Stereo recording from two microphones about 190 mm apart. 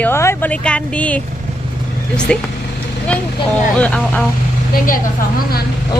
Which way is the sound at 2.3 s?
5° left (ahead or behind).